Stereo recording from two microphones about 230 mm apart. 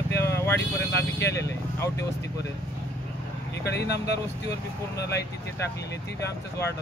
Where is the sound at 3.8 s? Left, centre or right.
Left.